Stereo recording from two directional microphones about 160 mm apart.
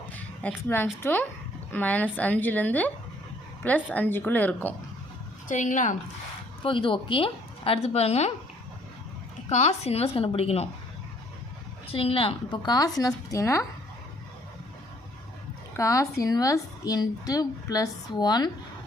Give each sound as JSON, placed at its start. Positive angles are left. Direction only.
{"t": 0.4, "sound": "a woman's voice", "side_deg": 15}
{"t": 5.5, "sound": "a woman's voice", "side_deg": 50}
{"t": 6.6, "sound": "a woman's voice", "side_deg": 30}
{"t": 9.5, "sound": "a woman's voice", "side_deg": 45}
{"t": 11.9, "sound": "speech", "side_deg": 35}
{"t": 15.7, "sound": "speech", "side_deg": 20}